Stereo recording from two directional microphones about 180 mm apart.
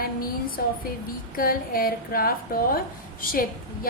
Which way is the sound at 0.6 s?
55° left (ahead or behind).